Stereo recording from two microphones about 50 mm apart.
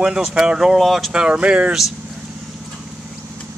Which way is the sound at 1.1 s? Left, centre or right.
Right.